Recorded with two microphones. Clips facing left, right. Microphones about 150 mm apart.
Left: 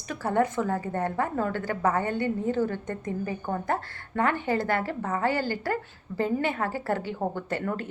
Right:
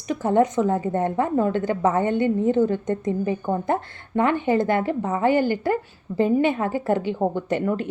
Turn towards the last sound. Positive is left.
turn(degrees=-20)  # may be behind; listen again after turning